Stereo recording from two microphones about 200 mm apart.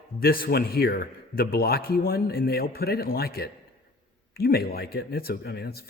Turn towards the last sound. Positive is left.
turn(degrees=50)  # may be behind; listen again after turning